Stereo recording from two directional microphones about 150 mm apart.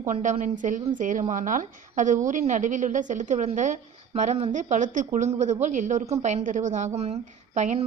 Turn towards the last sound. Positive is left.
turn(degrees=-50)  # may be behind; listen again after turning